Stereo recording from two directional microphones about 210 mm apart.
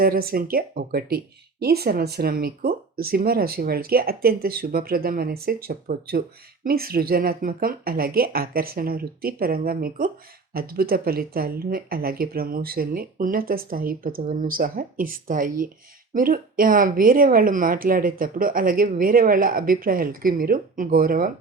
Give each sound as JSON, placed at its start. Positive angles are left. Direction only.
{"t": 0.0, "sound": "speech", "side_deg": -45}